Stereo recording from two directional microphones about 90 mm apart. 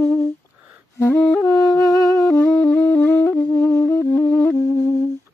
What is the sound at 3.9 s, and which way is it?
Music, 20° left (ahead or behind).